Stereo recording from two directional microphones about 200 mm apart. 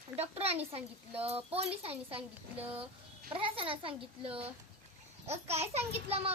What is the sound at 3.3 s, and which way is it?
A child's voice, 25° right (ahead or behind).